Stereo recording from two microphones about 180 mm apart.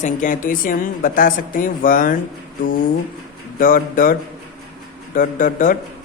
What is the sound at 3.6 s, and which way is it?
Speech, 50° left (ahead or behind).